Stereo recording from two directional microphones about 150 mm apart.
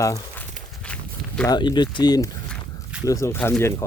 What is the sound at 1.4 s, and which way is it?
Speech, 30° left (ahead or behind).